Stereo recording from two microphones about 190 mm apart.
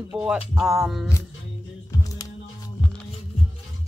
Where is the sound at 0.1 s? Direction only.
5° right (ahead or behind).